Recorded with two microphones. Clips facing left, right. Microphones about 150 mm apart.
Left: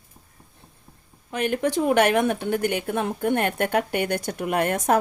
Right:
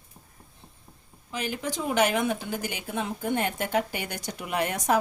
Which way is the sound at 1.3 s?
60° left (ahead or behind).